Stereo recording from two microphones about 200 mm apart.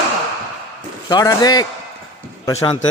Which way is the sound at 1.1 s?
20° left (ahead or behind).